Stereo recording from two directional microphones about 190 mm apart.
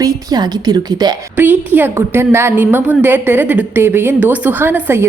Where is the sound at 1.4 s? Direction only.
10° right (ahead or behind).